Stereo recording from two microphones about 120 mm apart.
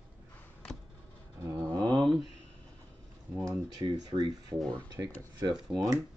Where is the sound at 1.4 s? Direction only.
25° right (ahead or behind).